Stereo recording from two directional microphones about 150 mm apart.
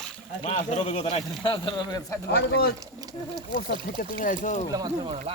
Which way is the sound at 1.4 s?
30° left (ahead or behind).